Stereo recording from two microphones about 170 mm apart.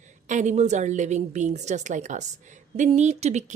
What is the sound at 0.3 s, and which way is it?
A woman's voice, 45° right (ahead or behind).